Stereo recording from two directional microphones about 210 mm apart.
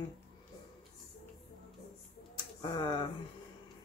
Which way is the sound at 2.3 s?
20° left (ahead or behind).